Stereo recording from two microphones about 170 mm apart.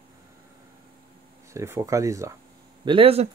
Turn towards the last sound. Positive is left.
turn(degrees=-35)  # may be behind; listen again after turning